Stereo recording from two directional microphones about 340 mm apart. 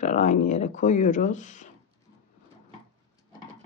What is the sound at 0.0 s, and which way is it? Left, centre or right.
Speech, left.